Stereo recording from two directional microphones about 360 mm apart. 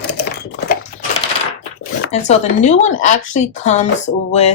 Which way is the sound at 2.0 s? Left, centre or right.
Centre.